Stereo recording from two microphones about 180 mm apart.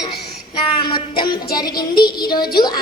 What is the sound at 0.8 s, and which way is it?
Speech, 25° left (ahead or behind).